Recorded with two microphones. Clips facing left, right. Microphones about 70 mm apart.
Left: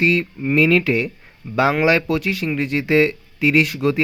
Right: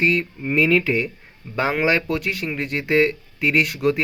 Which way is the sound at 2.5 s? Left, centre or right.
Right.